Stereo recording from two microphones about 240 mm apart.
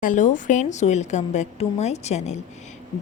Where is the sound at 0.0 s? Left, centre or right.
Left.